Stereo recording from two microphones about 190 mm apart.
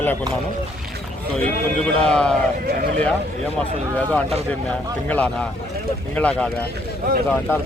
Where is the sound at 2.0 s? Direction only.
5° left (ahead or behind).